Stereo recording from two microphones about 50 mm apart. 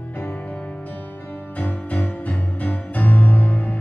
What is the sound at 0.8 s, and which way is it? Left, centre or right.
Music, left.